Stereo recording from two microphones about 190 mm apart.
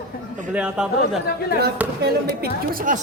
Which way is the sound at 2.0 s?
50° right (ahead or behind).